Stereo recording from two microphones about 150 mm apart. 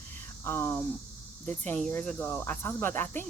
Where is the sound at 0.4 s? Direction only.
15° left (ahead or behind).